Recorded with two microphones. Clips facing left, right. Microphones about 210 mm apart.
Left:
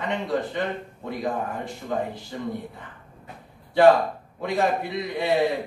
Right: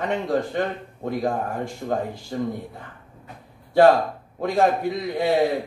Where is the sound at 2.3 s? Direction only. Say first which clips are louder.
Right 8 dB; 45° right (ahead or behind).